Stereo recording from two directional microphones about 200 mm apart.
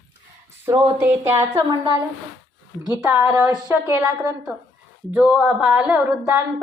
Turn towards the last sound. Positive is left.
turn(degrees=-10)  # may be behind; listen again after turning